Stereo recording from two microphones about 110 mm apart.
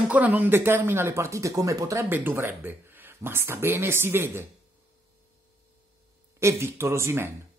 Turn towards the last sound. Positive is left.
turn(degrees=-20)  # may be behind; listen again after turning